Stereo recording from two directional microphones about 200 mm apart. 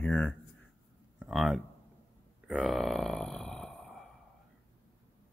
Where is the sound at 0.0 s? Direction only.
5° left (ahead or behind).